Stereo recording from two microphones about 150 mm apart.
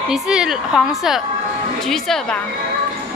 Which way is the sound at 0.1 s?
5° right (ahead or behind).